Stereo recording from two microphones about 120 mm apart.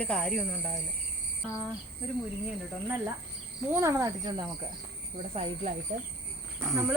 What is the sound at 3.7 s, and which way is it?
Speech, 25° right (ahead or behind).